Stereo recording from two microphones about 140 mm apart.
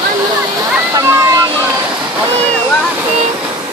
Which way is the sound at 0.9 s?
20° right (ahead or behind).